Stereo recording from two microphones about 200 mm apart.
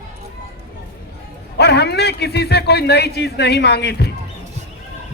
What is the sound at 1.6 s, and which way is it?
Speech, 55° left (ahead or behind).